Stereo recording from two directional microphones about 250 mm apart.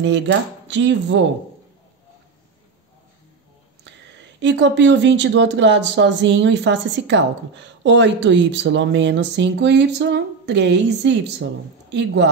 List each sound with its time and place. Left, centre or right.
0.0 s speech: right
4.4 s speech: right